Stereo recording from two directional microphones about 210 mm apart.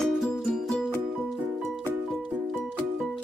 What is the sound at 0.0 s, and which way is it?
Music, centre (ahead or behind).